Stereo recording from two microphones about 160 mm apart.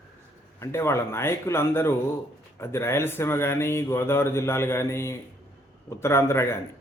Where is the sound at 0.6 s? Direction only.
15° left (ahead or behind).